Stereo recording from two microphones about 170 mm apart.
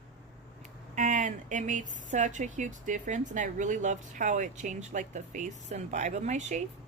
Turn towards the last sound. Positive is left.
turn(degrees=-45)  # may be behind; listen again after turning